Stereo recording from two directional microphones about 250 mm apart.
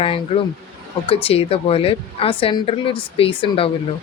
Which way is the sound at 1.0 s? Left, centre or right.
Left.